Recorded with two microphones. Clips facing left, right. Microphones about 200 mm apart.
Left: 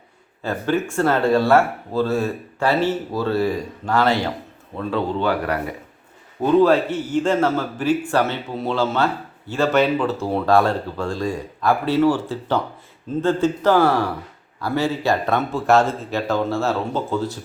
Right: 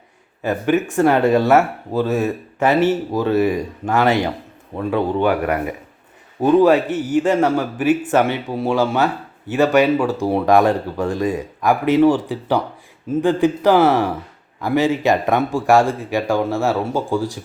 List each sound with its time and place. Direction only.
0.4 s speech: 15° right (ahead or behind)